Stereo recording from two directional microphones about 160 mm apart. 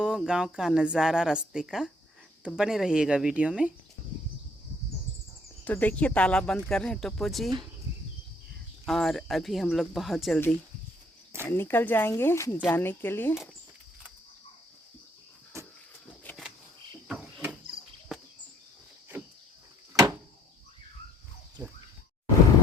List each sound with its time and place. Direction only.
0.0 s speech: 5° right (ahead or behind)
5.6 s speech: 10° left (ahead or behind)
8.9 s speech: centre (ahead or behind)
11.4 s speech: 15° left (ahead or behind)
17.1 s cricket: 5° right (ahead or behind)
21.6 s a sound: 15° right (ahead or behind)